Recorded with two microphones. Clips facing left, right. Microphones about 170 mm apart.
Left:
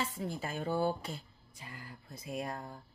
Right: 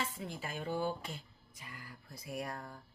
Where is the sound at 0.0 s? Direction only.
40° left (ahead or behind).